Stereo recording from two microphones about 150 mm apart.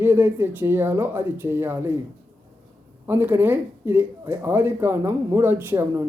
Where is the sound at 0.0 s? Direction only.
15° right (ahead or behind).